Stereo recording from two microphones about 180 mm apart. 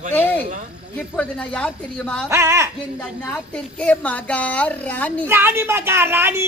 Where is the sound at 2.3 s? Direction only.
15° right (ahead or behind).